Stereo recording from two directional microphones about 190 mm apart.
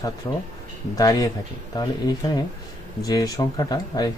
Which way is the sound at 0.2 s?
20° left (ahead or behind).